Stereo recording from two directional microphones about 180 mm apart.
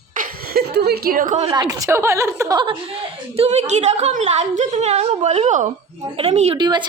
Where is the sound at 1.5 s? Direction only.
20° right (ahead or behind); by 6.6 s 35° right (ahead or behind).